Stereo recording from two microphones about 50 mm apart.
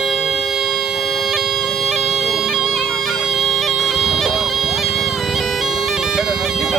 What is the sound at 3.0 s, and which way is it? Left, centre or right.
Bagpipes, centre.